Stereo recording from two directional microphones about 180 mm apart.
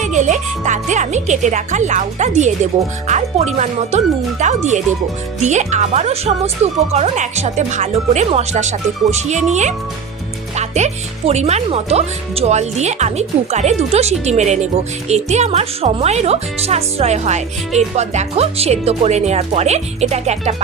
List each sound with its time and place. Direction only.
0.0 s speech: 40° right (ahead or behind)